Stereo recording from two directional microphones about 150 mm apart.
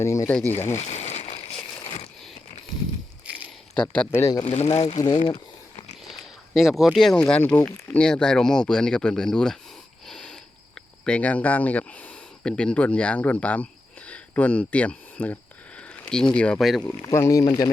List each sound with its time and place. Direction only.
0.0 s speech: 20° left (ahead or behind)
0.3 s speech: 10° left (ahead or behind)
0.5 s crumpling: 45° left (ahead or behind)
3.8 s speech: 5° left (ahead or behind)
4.1 s speech: 20° left (ahead or behind)
4.4 s speech: 45° left (ahead or behind)
6.1 s a sound: centre (ahead or behind)
7.2 s speech: 5° left (ahead or behind)
10.1 s a sound: 5° left (ahead or behind)
10.8 s speech: 5° left (ahead or behind)
15.8 s a sound: 5° left (ahead or behind)
16.3 s speech: 5° left (ahead or behind)
17.0 s speech: 20° left (ahead or behind)